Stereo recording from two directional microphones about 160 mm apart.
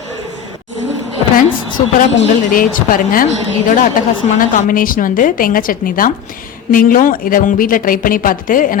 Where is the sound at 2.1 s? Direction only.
60° left (ahead or behind).